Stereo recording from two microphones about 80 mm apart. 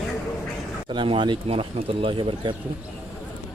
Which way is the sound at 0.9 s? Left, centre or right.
Right.